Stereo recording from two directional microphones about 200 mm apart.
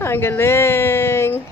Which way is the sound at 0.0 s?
10° left (ahead or behind).